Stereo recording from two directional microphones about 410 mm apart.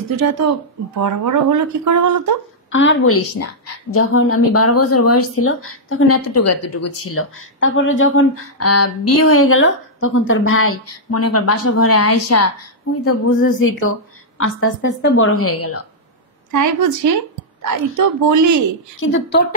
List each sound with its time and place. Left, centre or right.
0.1 s speech: right
2.7 s a woman's voice: left
16.5 s speech: right
18.9 s a woman's voice: left